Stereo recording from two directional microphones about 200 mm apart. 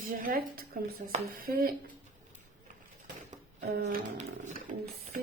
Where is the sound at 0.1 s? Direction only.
45° right (ahead or behind).